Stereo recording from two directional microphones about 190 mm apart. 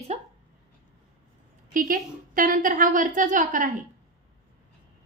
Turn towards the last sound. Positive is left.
turn(degrees=-45)  # may be behind; listen again after turning